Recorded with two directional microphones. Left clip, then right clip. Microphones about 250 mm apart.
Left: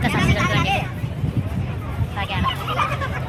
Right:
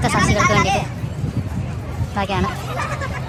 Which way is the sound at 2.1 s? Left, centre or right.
Centre.